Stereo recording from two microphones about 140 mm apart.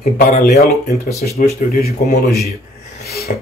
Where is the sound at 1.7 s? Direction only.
90° left.